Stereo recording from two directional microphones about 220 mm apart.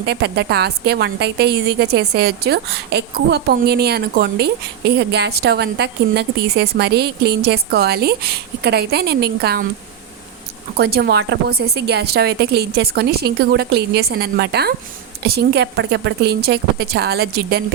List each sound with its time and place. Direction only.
0.0 s a woman's voice: 50° right (ahead or behind)
10.8 s a woman's voice: 45° right (ahead or behind)